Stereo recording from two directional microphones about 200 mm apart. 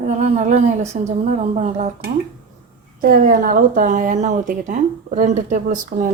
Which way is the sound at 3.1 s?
45° right (ahead or behind).